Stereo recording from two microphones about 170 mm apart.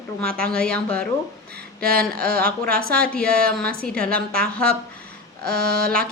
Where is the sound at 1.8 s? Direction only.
60° right (ahead or behind).